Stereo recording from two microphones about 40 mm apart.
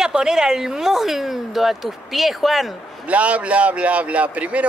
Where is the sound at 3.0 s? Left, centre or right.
Right.